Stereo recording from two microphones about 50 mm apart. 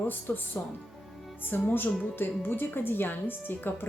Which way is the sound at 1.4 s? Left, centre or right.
Left.